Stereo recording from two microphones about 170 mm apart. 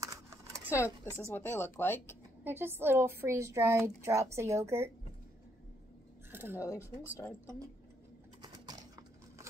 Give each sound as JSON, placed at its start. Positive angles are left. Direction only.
{"t": 0.0, "sound": "computer keyboard", "side_deg": -15}
{"t": 0.7, "sound": "speech", "side_deg": 15}
{"t": 2.4, "sound": "a woman's voice", "side_deg": -10}
{"t": 6.3, "sound": "a sound", "side_deg": -10}
{"t": 6.6, "sound": "speech", "side_deg": 20}
{"t": 8.4, "sound": "a sound", "side_deg": -25}